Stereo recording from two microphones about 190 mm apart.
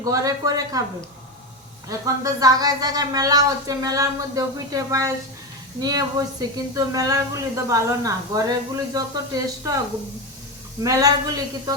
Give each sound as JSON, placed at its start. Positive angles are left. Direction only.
{"t": 0.0, "sound": "speech", "side_deg": -20}
{"t": 1.9, "sound": "speech", "side_deg": -20}
{"t": 10.8, "sound": "speech", "side_deg": -20}